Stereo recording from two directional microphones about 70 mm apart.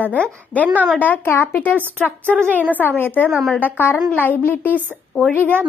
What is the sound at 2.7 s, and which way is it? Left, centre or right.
A woman's voice, left.